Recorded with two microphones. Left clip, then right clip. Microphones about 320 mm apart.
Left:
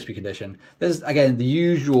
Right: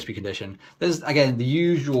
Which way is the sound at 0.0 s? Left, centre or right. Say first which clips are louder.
Even; centre.